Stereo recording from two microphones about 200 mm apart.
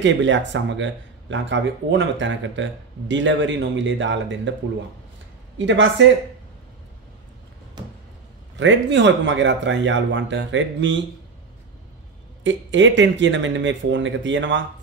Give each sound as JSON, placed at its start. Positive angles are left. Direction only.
{"t": 0.0, "sound": "speech", "side_deg": -65}
{"t": 7.8, "sound": "a sound", "side_deg": -20}
{"t": 8.5, "sound": "speech", "side_deg": -65}
{"t": 12.4, "sound": "speech", "side_deg": -65}